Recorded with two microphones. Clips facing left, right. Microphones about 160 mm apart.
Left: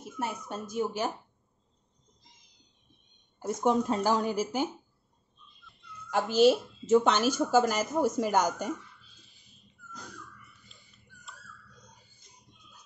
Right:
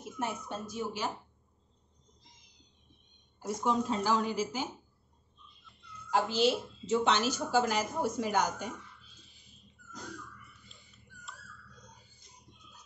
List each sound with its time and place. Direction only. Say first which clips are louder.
0.5 s a woman's voice: left 5 dB; 50° left (ahead or behind)
3.6 s a woman's voice: left 4 dB; 50° left (ahead or behind)
6.0 s a woman's voice: left 6 dB; 50° left (ahead or behind)